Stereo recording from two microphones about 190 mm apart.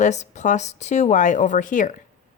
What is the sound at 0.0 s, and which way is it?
A woman's voice, 40° left (ahead or behind).